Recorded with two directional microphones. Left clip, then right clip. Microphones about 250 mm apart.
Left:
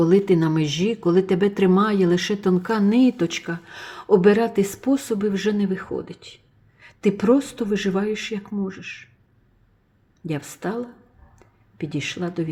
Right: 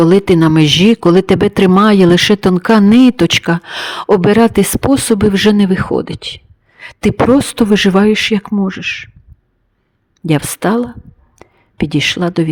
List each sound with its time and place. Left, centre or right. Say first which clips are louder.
0.0 s speech: right 9 dB; right
10.2 s speech: right 15 dB; right
11.3 s a sound: right 13 dB; right